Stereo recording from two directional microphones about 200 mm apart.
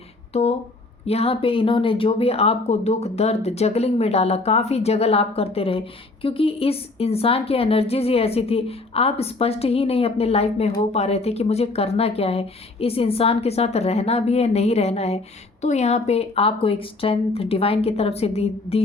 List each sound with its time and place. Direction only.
1.0 s speech: 30° left (ahead or behind)